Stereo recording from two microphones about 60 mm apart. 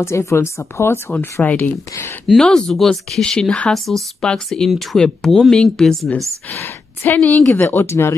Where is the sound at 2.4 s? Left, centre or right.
Centre.